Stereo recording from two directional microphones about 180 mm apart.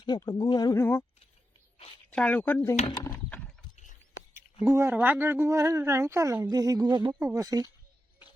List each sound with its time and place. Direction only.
0.0 s speech: 20° left (ahead or behind)
2.0 s speech: 5° left (ahead or behind)
2.7 s speech: 30° left (ahead or behind)
3.2 s clip-clop: 10° left (ahead or behind)
4.6 s speech: 15° right (ahead or behind)